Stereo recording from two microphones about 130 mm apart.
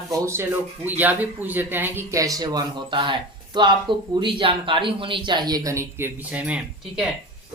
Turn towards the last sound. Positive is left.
turn(degrees=-10)  # may be behind; listen again after turning